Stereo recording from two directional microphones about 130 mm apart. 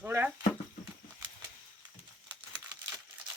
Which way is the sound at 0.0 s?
15° right (ahead or behind).